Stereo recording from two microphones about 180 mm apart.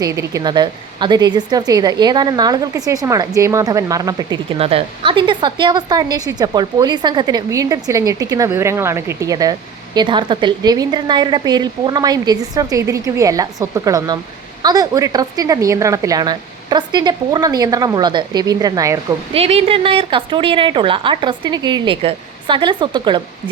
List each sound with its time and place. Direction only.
0.0 s a woman's voice: 15° right (ahead or behind)
19.3 s a woman's voice: 35° right (ahead or behind)